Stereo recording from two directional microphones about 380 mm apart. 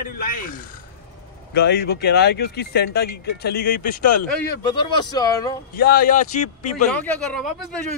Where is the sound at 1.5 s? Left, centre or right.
Left; by 5.5 s centre.